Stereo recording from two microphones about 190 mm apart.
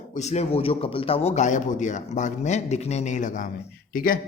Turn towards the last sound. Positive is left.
turn(degrees=45)  # may be behind; listen again after turning